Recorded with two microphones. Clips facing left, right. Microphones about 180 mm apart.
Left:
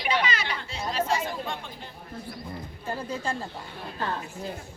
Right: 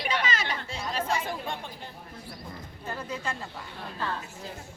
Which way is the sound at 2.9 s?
30° left (ahead or behind).